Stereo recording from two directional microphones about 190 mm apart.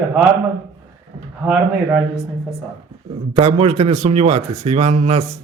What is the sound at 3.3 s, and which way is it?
Speech, 30° right (ahead or behind).